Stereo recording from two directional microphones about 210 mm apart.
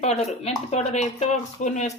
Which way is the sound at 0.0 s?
30° left (ahead or behind).